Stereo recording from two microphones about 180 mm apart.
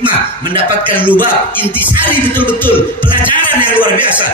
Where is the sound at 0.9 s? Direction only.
10° left (ahead or behind).